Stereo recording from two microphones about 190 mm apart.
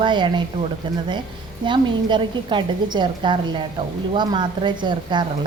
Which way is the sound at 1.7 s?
25° right (ahead or behind).